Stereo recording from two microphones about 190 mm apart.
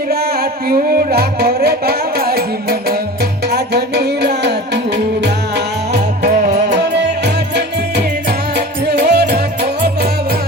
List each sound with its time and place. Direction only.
0.1 s music: 55° right (ahead or behind)
6.3 s music: 40° right (ahead or behind)
6.7 s music: 65° right (ahead or behind)